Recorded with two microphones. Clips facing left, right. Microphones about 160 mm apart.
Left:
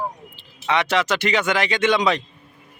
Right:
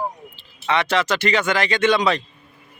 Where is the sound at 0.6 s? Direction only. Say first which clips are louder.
Even; 15° left (ahead or behind).